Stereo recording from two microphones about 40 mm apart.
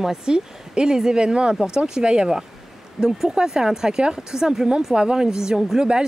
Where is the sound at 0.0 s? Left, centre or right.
Centre.